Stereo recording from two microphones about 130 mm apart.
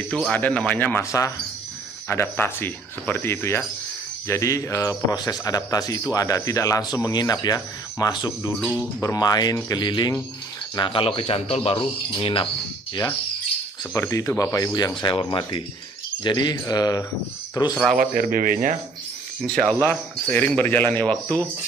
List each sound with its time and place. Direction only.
0.1 s a man's voice: 10° left (ahead or behind); by 12.4 s 40° left (ahead or behind)
13.9 s a man's voice: 20° left (ahead or behind)
15.0 s speech: 40° left (ahead or behind)
17.9 s a man's voice: 90° right
19.4 s speech: 5° left (ahead or behind)